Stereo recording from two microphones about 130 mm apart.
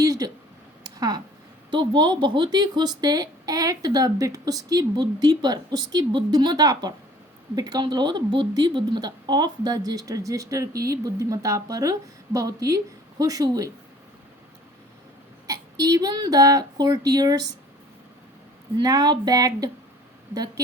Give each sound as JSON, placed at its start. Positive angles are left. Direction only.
{"t": 0.0, "sound": "a sound", "side_deg": -25}
{"t": 0.9, "sound": "speech", "side_deg": -30}
{"t": 15.4, "sound": "speech", "side_deg": -30}
{"t": 18.8, "sound": "speech", "side_deg": -30}